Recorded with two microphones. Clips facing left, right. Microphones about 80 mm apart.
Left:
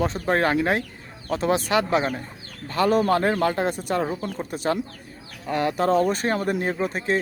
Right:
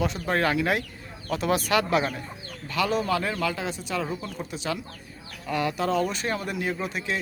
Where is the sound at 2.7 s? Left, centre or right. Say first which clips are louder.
Left 5 dB; left.